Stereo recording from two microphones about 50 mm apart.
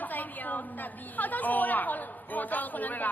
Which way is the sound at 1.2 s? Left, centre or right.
Left.